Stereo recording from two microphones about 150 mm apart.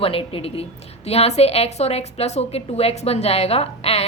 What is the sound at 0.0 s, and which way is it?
A woman's voice, 40° left (ahead or behind).